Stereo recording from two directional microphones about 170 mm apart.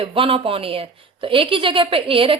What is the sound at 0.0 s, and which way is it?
Speech, 30° right (ahead or behind).